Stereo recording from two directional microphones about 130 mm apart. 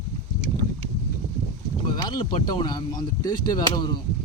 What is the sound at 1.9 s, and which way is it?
Speech, 35° left (ahead or behind).